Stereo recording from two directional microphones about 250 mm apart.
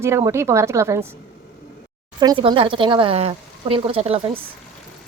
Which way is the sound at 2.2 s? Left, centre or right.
Centre.